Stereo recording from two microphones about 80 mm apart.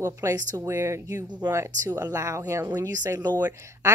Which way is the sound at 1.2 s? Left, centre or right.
Right.